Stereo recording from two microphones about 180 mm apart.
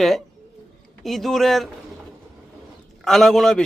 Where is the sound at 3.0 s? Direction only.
Centre (ahead or behind).